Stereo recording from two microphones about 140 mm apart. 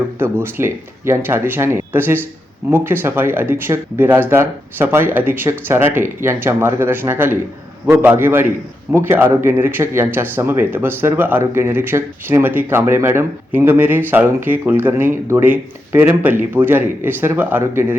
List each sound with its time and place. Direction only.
0.2 s a man's voice: 15° right (ahead or behind)